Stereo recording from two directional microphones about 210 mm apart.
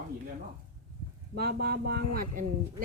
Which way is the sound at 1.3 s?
45° right (ahead or behind).